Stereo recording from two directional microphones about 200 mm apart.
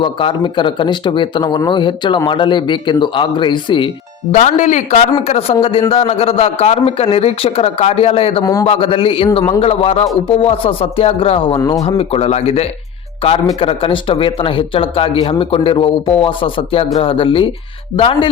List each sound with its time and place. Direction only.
0.0 s speech: 25° left (ahead or behind)
4.3 s speech: 35° left (ahead or behind); by 11.8 s 15° left (ahead or behind)
11.8 s speech: 30° left (ahead or behind)